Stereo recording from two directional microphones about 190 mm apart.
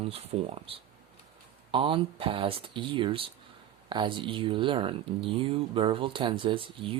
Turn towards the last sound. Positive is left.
turn(degrees=-30)  # may be behind; listen again after turning